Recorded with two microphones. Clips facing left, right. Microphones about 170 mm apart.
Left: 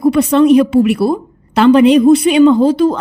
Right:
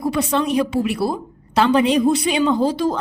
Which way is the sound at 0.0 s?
60° left (ahead or behind).